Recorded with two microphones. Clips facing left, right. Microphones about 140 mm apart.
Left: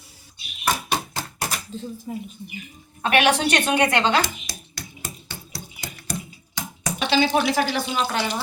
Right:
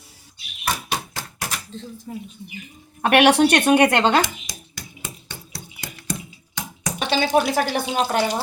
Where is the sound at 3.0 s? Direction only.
65° right (ahead or behind).